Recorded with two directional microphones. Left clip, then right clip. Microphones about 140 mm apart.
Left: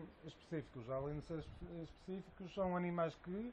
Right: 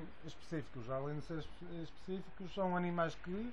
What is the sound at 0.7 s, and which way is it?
Speech, 5° left (ahead or behind).